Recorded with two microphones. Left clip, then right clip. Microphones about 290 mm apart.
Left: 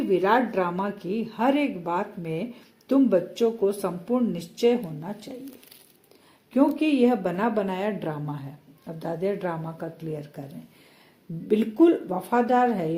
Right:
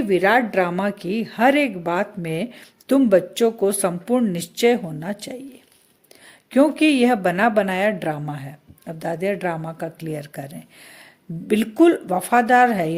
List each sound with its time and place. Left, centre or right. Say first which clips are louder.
0.1 s speech: right 5 dB; right
6.5 s speech: right 6 dB; right